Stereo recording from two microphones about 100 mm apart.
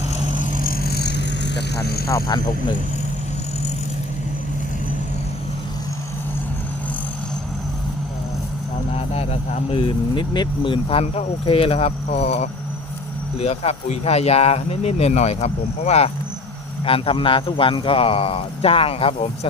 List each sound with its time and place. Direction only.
2.0 s speech: 30° left (ahead or behind)
8.9 s speech: 80° left
9.8 s speech: 50° left (ahead or behind); by 16.1 s 90° left
16.8 s speech: 65° left (ahead or behind)